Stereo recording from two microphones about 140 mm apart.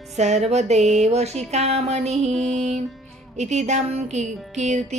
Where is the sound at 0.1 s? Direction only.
50° right (ahead or behind).